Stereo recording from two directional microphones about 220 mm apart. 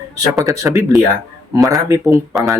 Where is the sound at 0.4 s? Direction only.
15° right (ahead or behind).